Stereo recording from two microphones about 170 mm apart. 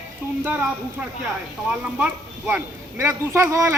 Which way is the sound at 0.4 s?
10° right (ahead or behind).